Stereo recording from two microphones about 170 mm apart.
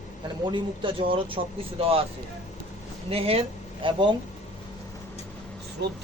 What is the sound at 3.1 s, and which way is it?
Speech, 35° right (ahead or behind).